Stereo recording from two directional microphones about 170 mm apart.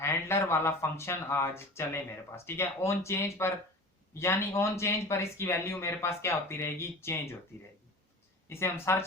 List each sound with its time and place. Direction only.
0.0 s speech: 15° left (ahead or behind)
8.4 s speech: 15° left (ahead or behind)